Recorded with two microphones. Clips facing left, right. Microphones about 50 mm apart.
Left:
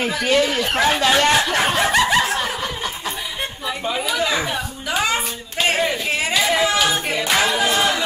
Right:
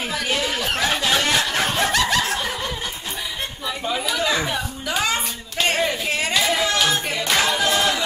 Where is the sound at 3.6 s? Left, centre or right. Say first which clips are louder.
Left 1 dB; centre.